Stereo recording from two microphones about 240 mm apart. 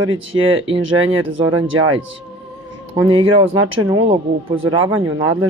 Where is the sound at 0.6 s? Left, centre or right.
Right.